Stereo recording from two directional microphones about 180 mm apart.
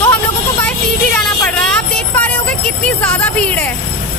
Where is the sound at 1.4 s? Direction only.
10° left (ahead or behind).